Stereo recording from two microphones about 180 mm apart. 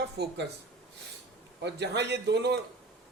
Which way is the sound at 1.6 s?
70° right (ahead or behind).